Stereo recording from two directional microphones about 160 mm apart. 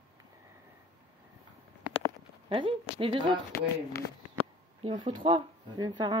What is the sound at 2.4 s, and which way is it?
Speech, 35° right (ahead or behind).